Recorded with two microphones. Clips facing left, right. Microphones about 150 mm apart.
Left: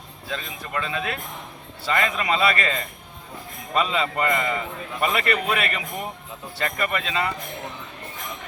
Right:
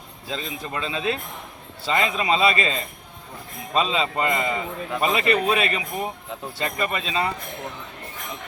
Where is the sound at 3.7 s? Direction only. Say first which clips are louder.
Right 1 dB; 25° right (ahead or behind).